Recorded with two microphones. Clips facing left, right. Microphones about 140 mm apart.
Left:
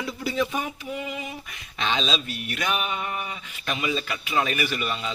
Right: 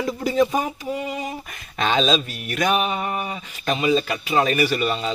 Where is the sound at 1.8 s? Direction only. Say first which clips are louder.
Right 7 dB; 45° right (ahead or behind).